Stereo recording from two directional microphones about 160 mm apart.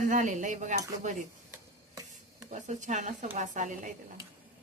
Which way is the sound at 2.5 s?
50° right (ahead or behind).